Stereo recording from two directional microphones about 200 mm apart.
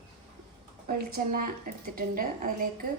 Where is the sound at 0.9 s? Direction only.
40° right (ahead or behind).